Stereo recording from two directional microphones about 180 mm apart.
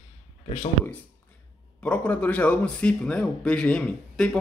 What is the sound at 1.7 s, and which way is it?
Speech, 5° left (ahead or behind).